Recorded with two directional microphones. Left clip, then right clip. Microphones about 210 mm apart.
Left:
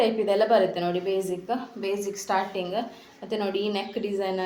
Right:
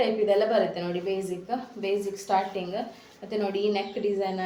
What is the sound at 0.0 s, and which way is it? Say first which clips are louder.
A woman's voice: left 1 dB; 35° left (ahead or behind).